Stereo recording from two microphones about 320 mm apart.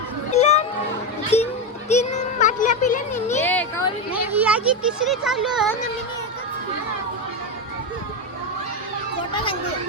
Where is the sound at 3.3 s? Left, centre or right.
Centre.